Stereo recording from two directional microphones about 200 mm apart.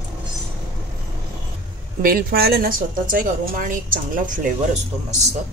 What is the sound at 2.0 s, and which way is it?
A woman's voice, 45° right (ahead or behind).